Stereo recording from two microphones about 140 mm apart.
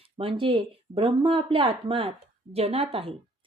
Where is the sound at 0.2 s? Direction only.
40° right (ahead or behind).